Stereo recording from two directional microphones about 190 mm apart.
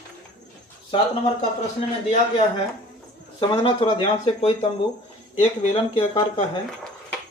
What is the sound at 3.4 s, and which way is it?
Speech, 25° left (ahead or behind).